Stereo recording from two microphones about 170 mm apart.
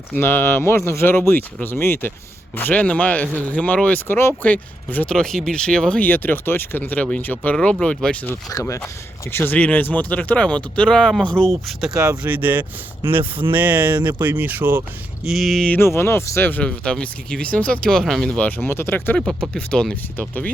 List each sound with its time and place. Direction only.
0.1 s speech: 10° left (ahead or behind)
8.4 s speech: 20° left (ahead or behind); by 11.9 s centre (ahead or behind)
12.0 s speech: 10° right (ahead or behind); by 20.5 s 10° left (ahead or behind)